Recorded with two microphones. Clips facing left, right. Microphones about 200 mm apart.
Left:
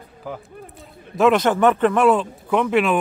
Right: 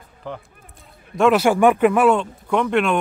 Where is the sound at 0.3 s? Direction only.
5° left (ahead or behind).